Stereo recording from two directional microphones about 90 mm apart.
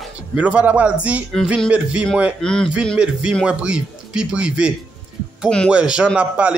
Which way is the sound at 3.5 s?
10° right (ahead or behind).